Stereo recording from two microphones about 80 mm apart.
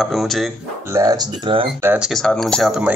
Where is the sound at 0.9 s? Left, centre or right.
Right.